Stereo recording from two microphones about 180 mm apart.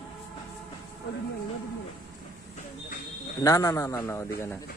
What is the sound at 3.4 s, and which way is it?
Speech, 20° left (ahead or behind).